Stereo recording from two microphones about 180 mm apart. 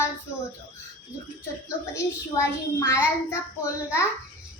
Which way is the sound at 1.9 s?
15° left (ahead or behind).